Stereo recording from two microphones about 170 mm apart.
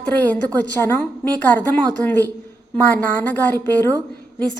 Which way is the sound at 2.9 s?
10° left (ahead or behind).